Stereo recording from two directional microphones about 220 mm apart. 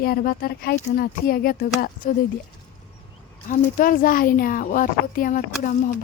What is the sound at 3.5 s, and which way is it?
Speech, 40° left (ahead or behind).